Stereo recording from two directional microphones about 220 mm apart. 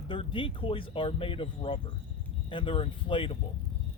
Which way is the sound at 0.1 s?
25° left (ahead or behind).